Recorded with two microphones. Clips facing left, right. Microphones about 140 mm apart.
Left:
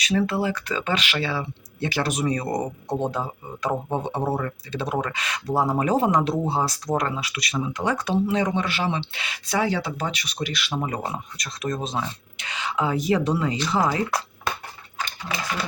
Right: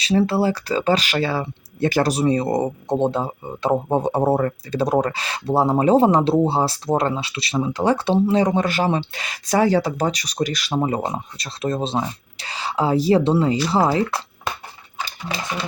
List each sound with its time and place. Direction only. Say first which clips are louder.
0.0 s speech: right 5 dB; 30° right (ahead or behind)
15.0 s speech: right 2 dB; 30° right (ahead or behind)